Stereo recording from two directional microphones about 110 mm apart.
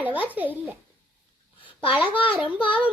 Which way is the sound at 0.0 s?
15° right (ahead or behind).